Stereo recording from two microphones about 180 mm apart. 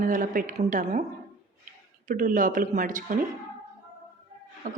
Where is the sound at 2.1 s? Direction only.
50° right (ahead or behind).